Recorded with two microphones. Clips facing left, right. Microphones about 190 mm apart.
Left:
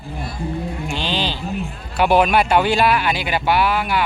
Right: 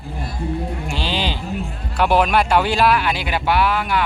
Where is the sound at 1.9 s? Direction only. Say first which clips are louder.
Left 1 dB; centre (ahead or behind).